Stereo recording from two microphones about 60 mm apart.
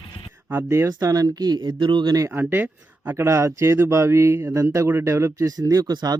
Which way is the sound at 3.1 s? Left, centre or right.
Right.